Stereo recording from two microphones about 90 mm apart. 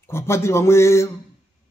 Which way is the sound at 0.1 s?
30° left (ahead or behind).